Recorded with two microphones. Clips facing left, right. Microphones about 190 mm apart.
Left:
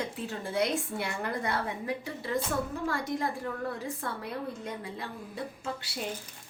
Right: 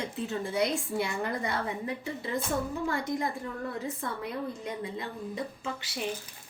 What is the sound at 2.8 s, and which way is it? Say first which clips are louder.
Speech: right 1 dB; 75° left (ahead or behind).